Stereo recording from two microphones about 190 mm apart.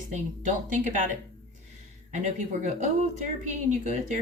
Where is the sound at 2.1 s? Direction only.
40° right (ahead or behind).